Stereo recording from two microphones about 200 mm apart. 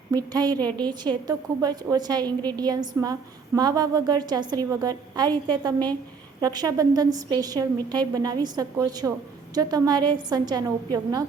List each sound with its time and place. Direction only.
0.1 s a woman's voice: 20° right (ahead or behind)